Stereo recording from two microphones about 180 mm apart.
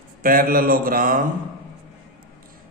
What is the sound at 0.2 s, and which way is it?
Speech, 55° right (ahead or behind).